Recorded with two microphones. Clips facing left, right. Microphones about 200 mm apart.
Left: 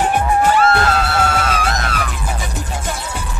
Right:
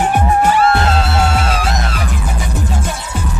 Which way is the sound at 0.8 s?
25° right (ahead or behind).